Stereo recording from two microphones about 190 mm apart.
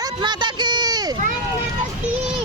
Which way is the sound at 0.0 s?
25° right (ahead or behind).